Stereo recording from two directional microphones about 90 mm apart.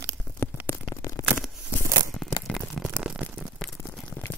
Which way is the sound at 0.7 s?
30° left (ahead or behind).